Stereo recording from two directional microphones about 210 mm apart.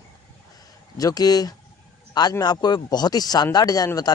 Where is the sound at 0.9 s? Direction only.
15° left (ahead or behind).